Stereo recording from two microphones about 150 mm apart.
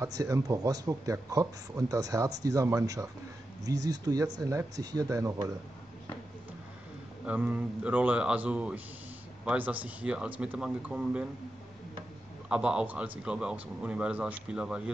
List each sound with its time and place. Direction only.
0.0 s speech: 20° right (ahead or behind)
7.2 s speech: 10° right (ahead or behind)
12.4 s speech: 5° right (ahead or behind)